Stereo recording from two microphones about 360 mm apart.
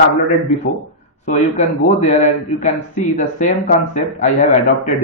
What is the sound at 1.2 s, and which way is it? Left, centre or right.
Speech, centre.